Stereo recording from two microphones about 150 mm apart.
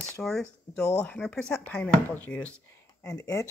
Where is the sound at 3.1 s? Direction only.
20° left (ahead or behind).